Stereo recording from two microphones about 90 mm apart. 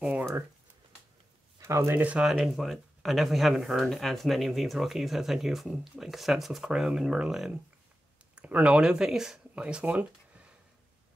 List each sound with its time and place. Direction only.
0.0 s a sound: 15° right (ahead or behind)
1.6 s speech: 35° right (ahead or behind)
2.0 s speech: 15° right (ahead or behind)
2.2 s speech: centre (ahead or behind)
8.4 s speech: 15° right (ahead or behind)